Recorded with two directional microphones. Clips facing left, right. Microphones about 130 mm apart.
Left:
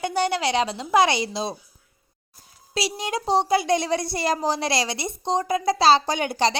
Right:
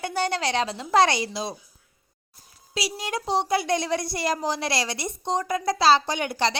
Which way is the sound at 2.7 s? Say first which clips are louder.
Left 3 dB; 25° left (ahead or behind).